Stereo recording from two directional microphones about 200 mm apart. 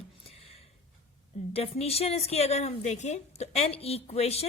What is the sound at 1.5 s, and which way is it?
A woman's voice, 30° left (ahead or behind).